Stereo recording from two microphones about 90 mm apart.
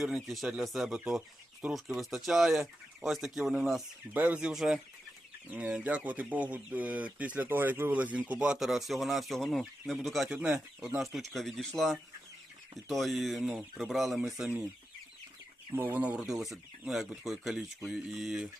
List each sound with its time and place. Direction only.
0.0 s speech: centre (ahead or behind)
4.1 s speech: 15° right (ahead or behind); by 10.3 s centre (ahead or behind)
10.3 s speech: 15° right (ahead or behind)
11.0 s speech: centre (ahead or behind)
15.7 s speech: 20° right (ahead or behind); by 18.3 s centre (ahead or behind)